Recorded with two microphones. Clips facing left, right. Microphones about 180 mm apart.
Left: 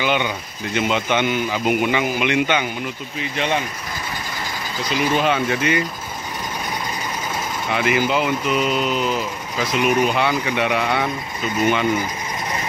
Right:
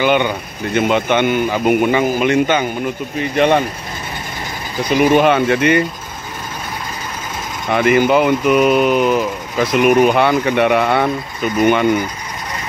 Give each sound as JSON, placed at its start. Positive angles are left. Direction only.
{"t": 0.0, "sound": "speech", "side_deg": -55}
{"t": 3.2, "sound": "speech", "side_deg": -55}
{"t": 4.8, "sound": "speech", "side_deg": -55}
{"t": 7.7, "sound": "speech", "side_deg": -55}